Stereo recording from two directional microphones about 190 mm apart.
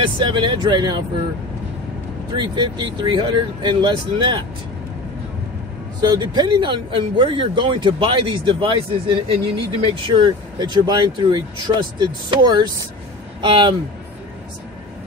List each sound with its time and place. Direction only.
0.0 s speech: 25° right (ahead or behind)
2.3 s speech: 25° right (ahead or behind)
5.9 s speech: 20° right (ahead or behind)